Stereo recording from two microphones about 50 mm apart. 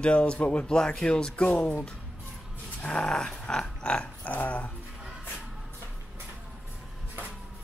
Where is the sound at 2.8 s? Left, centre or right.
Centre.